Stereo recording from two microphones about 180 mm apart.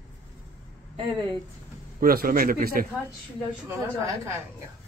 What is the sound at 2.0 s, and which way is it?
Speech, 55° right (ahead or behind).